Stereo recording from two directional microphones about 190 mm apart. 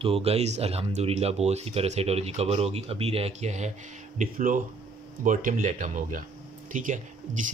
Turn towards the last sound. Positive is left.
turn(degrees=-40)  # may be behind; listen again after turning